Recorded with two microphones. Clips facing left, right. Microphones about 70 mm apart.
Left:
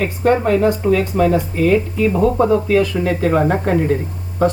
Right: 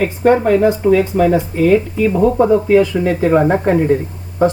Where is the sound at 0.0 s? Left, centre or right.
Centre.